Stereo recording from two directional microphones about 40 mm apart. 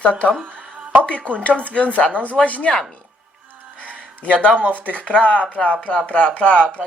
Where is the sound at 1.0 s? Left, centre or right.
Left.